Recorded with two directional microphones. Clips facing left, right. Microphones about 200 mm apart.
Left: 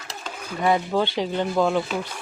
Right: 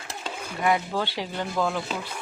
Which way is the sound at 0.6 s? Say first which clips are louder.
Left 4 dB; 25° left (ahead or behind).